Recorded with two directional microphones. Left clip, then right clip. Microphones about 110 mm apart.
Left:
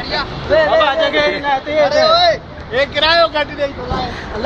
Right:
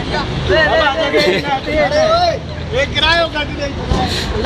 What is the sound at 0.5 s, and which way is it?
Speech, 30° left (ahead or behind).